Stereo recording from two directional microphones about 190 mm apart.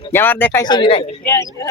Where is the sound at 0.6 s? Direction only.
25° left (ahead or behind).